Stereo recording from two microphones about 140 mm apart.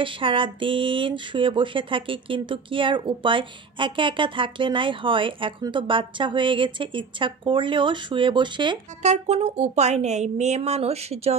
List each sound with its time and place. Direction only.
0.0 s speech: 40° right (ahead or behind)
9.0 s speech: 50° right (ahead or behind)